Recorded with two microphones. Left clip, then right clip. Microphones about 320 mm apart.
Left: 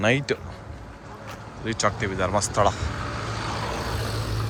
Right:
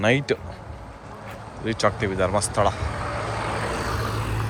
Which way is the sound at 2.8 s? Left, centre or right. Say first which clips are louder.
Right 3 dB; right.